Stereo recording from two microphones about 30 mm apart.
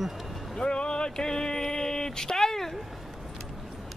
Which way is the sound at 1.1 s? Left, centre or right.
Centre.